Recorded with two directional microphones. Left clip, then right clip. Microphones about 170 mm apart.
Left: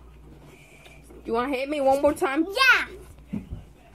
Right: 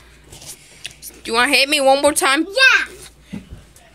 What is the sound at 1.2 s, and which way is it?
A woman's voice, 25° right (ahead or behind).